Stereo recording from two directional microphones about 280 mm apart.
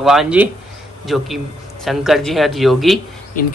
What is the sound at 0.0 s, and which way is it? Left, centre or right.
Speech, centre.